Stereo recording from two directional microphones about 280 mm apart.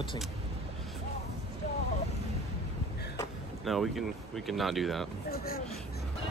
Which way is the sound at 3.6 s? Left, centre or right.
Centre.